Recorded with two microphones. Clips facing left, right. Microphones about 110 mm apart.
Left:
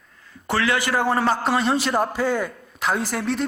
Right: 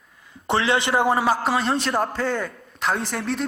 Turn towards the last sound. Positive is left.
turn(degrees=0)  # may be behind; listen again after turning